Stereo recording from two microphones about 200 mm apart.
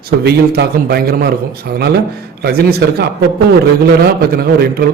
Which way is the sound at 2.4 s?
50° right (ahead or behind).